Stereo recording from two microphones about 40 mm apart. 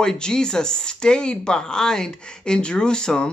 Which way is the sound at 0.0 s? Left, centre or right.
Centre.